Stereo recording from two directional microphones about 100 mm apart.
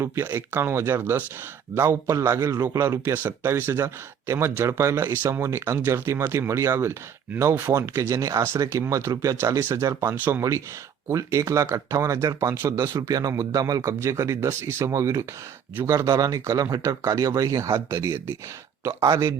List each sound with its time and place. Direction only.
0.0 s speech: 25° right (ahead or behind)